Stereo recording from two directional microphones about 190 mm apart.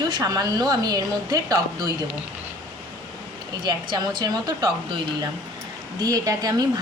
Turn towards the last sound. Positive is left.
turn(degrees=-20)  # may be behind; listen again after turning